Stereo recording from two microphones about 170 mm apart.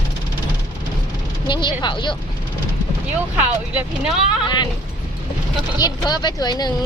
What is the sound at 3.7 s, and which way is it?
Speech, 5° right (ahead or behind).